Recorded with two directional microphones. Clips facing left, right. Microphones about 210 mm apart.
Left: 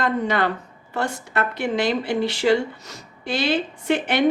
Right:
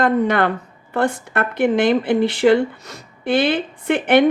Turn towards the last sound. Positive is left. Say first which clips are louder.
# right 6 dB
turn(degrees=-55)  # may be behind; listen again after turning